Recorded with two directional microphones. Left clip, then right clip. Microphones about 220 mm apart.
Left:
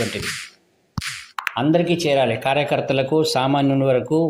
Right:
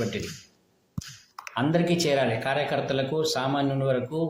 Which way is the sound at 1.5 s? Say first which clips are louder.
Left 5 dB; 20° left (ahead or behind).